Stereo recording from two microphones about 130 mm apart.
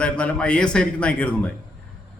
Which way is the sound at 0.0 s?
10° left (ahead or behind).